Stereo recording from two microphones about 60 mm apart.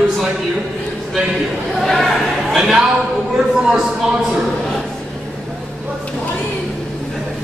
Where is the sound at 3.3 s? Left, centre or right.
Centre.